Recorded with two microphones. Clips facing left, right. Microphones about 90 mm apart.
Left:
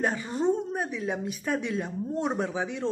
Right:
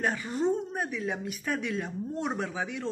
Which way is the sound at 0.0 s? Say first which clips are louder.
Left 2 dB; 25° left (ahead or behind).